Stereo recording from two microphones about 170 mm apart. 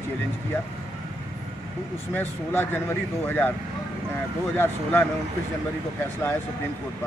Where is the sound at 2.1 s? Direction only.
10° left (ahead or behind).